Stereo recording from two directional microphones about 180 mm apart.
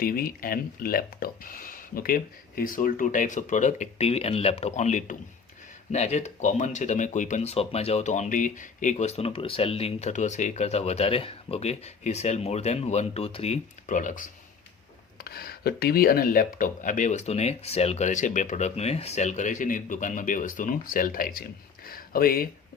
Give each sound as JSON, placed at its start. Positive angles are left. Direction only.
{"t": 0.0, "sound": "speech", "side_deg": 55}
{"t": 15.2, "sound": "speech", "side_deg": 60}